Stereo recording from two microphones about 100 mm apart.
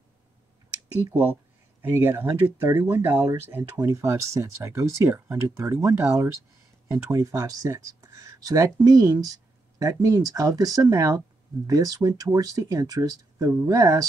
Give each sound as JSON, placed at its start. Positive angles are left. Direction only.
{"t": 1.8, "sound": "speech", "side_deg": -20}
{"t": 3.7, "sound": "speech", "side_deg": -35}